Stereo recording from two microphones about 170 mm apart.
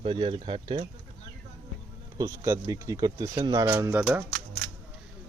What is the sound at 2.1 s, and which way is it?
Speech, 20° right (ahead or behind).